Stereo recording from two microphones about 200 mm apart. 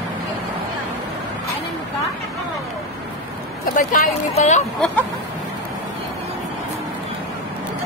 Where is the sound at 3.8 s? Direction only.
45° left (ahead or behind).